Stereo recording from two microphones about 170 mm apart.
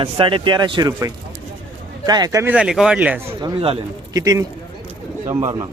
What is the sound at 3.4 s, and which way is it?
Speech, 30° right (ahead or behind).